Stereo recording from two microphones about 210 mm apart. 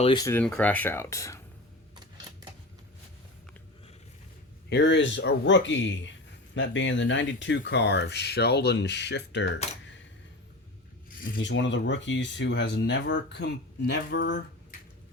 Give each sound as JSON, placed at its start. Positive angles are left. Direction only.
{"t": 0.0, "sound": "speech", "side_deg": 20}
{"t": 4.7, "sound": "speech", "side_deg": 55}
{"t": 11.3, "sound": "speech", "side_deg": 60}